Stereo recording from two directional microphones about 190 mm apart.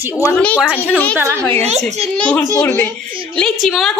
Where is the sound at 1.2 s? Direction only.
15° right (ahead or behind).